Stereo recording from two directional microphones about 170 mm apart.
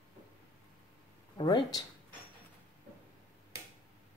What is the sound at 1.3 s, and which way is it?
Speech, 25° left (ahead or behind).